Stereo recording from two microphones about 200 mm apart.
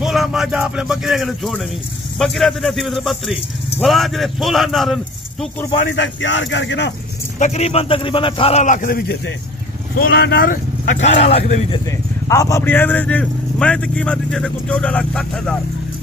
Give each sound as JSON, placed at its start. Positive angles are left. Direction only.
{"t": 0.0, "sound": "speech", "side_deg": 0}
{"t": 5.9, "sound": "speech", "side_deg": 65}
{"t": 7.3, "sound": "speech", "side_deg": 35}
{"t": 12.3, "sound": "speech", "side_deg": 15}